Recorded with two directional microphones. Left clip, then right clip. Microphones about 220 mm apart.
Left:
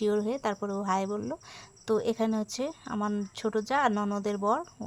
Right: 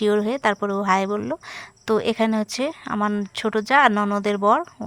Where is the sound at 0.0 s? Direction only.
20° right (ahead or behind).